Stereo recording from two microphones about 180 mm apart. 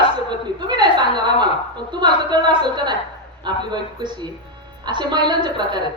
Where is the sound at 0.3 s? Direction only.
25° right (ahead or behind).